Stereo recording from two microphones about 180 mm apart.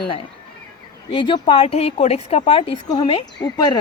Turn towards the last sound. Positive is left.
turn(degrees=20)  # may be behind; listen again after turning